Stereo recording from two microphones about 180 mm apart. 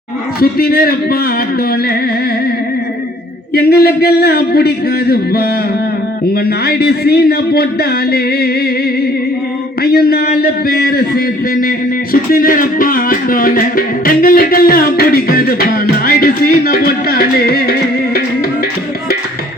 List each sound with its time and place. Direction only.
0.3 s a man's voice: 55° left (ahead or behind)
3.5 s a man's voice: 60° left (ahead or behind)
9.8 s a man's voice: 60° left (ahead or behind)